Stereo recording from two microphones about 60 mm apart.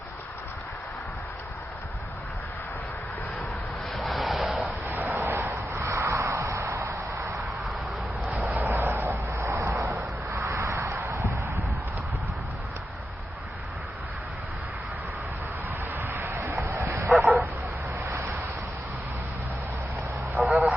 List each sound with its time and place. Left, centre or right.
3.9 s vehicle: centre
4.9 s vehicle: right
5.8 s vehicle: right
8.4 s vehicle: right
11.0 s a sound: right
16.0 s a sound: right
16.6 s bow-wow: right
17.1 s bow-wow: centre
18.1 s vehicle: right
20.4 s vehicle: centre